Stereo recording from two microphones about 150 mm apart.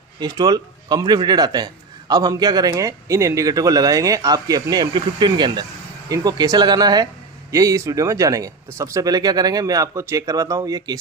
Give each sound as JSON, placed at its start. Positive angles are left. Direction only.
{"t": 0.2, "sound": "speech", "side_deg": -25}